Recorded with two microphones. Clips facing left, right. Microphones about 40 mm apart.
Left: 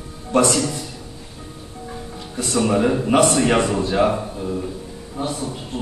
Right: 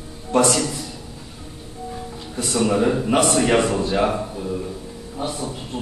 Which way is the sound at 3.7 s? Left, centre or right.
Centre.